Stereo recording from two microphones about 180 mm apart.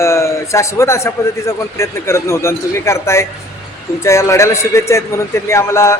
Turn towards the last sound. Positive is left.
turn(degrees=15)  # may be behind; listen again after turning